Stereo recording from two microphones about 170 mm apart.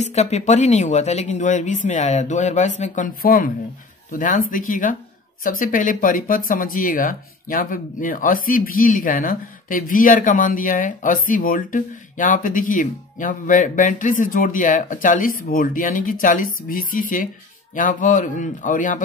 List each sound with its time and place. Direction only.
0.0 s speech: 40° left (ahead or behind)